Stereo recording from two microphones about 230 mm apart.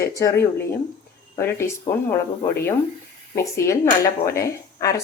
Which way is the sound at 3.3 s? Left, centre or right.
Centre.